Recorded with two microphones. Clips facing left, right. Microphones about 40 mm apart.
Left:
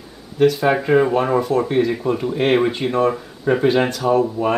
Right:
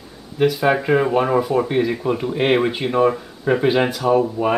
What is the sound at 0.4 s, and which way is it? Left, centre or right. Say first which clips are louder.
Speech: left 1 dB; centre.